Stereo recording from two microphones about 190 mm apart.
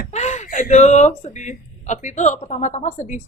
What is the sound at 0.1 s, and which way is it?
Speech, 35° left (ahead or behind).